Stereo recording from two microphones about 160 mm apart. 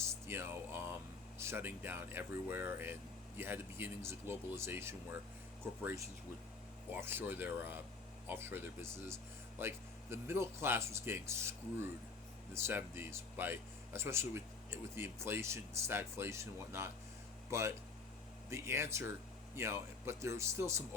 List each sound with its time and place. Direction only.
0.0 s music: 15° right (ahead or behind)
1.4 s speech: 15° right (ahead or behind)
6.9 s speech: 15° right (ahead or behind)